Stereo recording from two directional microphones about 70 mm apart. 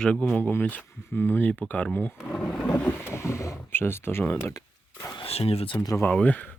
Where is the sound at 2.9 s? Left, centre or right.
Left.